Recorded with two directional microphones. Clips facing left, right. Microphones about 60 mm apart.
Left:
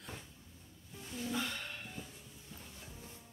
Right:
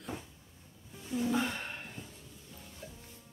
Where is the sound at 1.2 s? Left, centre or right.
Right.